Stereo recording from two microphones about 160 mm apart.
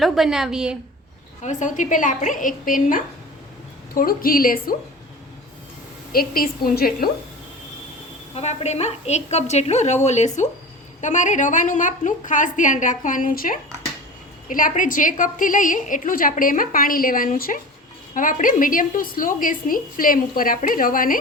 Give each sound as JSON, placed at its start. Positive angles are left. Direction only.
{"t": 0.0, "sound": "a woman's voice", "side_deg": 0}
{"t": 1.4, "sound": "a woman's voice", "side_deg": 50}
{"t": 6.1, "sound": "a woman's voice", "side_deg": 65}
{"t": 8.4, "sound": "a woman's voice", "side_deg": 40}